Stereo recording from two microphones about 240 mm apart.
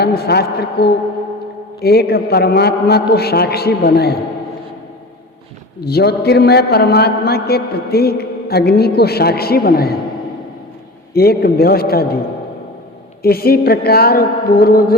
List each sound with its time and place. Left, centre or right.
0.0 s a man's voice: left
5.8 s a man's voice: left
11.1 s a man's voice: left
13.2 s a man's voice: left